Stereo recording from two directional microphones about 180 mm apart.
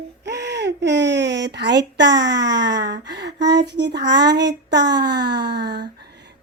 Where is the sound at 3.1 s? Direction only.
70° right (ahead or behind).